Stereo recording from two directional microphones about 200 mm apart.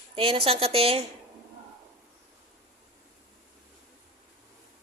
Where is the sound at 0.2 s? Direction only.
25° right (ahead or behind).